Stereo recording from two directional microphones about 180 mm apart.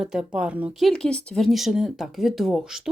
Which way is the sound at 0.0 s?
5° right (ahead or behind).